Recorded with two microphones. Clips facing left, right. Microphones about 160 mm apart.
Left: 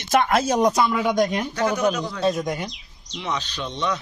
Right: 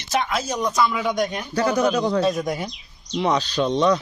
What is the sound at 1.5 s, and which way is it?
Speech, 35° right (ahead or behind).